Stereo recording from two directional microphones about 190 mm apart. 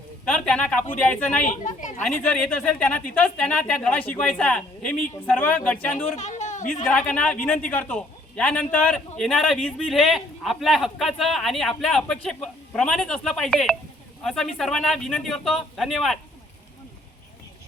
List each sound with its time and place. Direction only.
0.3 s speech: 5° left (ahead or behind)
1.5 s a woman's voice: 40° left (ahead or behind)
2.3 s a man's voice: 5° left (ahead or behind)
6.1 s a sound: 40° left (ahead or behind)
6.8 s a man's voice: 5° left (ahead or behind)